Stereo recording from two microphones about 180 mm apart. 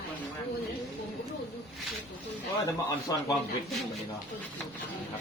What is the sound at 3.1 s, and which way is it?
Speech, 20° left (ahead or behind).